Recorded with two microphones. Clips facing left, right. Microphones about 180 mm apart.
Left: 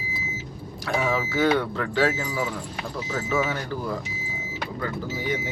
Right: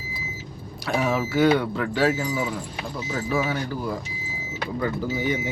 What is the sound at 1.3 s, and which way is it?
Speech, 15° right (ahead or behind).